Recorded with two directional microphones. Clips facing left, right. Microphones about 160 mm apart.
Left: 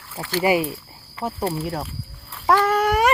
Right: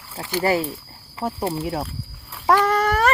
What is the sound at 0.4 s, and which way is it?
Speech, 15° left (ahead or behind).